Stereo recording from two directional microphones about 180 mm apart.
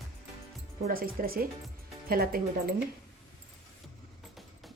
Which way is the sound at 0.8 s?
55° right (ahead or behind).